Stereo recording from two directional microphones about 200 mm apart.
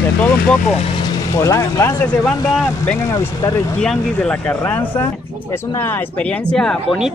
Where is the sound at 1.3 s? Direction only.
15° left (ahead or behind).